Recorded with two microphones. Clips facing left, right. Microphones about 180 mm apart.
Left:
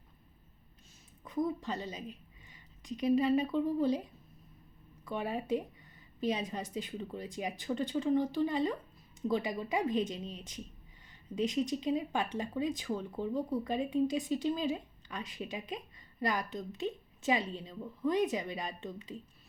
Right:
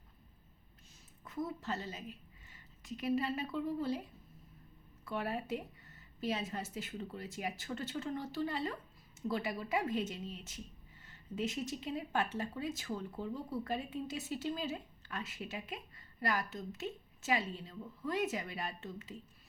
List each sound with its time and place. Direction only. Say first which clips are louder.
1.2 s a woman's voice: left 6 dB; 15° left (ahead or behind)
5.0 s speech: left 3 dB; 15° left (ahead or behind)